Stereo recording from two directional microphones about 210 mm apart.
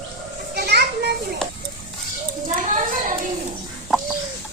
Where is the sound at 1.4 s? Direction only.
5° left (ahead or behind).